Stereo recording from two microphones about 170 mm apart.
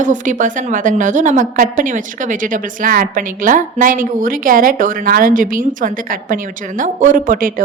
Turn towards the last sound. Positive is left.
turn(degrees=-55)  # may be behind; listen again after turning